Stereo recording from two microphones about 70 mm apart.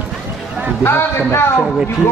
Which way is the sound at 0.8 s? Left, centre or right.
Left.